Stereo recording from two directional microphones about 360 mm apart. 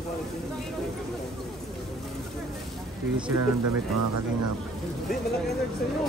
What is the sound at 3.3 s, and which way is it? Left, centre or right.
Speech, right.